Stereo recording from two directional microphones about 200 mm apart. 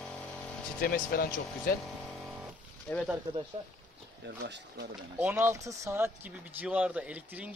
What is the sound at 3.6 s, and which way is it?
Speech, 25° right (ahead or behind).